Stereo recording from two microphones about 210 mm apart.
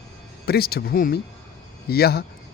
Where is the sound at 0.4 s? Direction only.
45° left (ahead or behind).